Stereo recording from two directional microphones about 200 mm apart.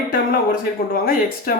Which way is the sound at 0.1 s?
45° left (ahead or behind).